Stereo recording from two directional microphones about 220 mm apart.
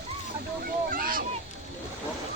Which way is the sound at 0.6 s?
40° right (ahead or behind).